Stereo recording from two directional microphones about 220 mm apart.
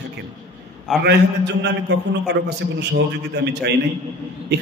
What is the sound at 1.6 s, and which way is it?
A man's voice, 50° right (ahead or behind).